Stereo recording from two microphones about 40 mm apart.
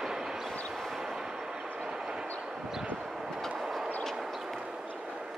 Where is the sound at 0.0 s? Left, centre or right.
Centre.